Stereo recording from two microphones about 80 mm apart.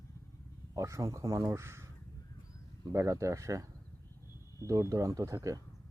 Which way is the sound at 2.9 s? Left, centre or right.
Right.